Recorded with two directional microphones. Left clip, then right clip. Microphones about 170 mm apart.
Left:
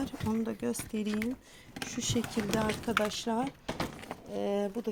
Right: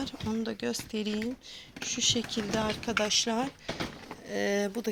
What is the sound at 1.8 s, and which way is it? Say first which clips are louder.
Speech: right 6 dB; 20° left (ahead or behind).